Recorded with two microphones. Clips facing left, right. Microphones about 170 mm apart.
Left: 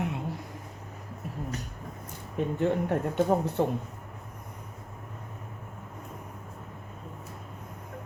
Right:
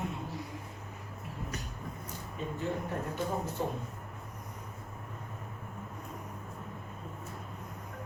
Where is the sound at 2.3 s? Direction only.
65° left (ahead or behind).